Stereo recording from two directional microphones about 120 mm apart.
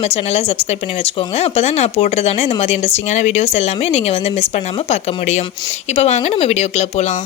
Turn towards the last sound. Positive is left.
turn(degrees=65)  # may be behind; listen again after turning